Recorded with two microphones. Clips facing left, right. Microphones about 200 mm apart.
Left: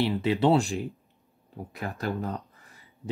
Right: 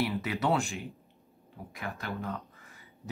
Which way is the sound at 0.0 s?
25° left (ahead or behind).